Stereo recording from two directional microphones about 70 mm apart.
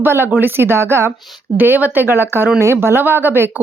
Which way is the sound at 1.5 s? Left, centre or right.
Right.